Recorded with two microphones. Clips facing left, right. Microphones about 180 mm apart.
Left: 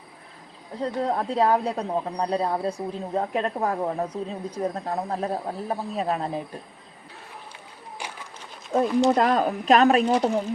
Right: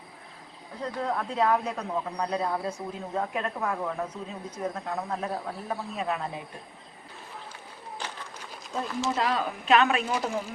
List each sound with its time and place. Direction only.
0.8 s speech: 30° left (ahead or behind)
8.0 s run: 10° left (ahead or behind)
9.0 s speech: 50° left (ahead or behind); by 10.4 s 30° left (ahead or behind)